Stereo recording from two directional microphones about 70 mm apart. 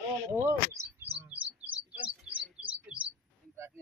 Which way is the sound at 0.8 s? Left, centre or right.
Right.